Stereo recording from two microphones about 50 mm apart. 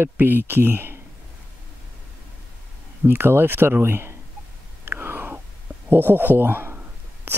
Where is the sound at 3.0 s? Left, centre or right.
Right.